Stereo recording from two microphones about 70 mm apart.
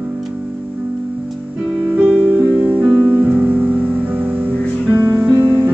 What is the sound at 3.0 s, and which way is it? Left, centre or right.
Music, right.